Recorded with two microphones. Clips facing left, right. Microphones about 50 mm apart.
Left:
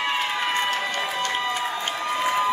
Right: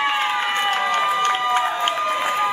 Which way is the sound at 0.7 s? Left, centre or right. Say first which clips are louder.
Right 6 dB; right.